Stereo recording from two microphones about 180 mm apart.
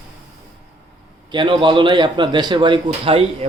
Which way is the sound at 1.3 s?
25° right (ahead or behind).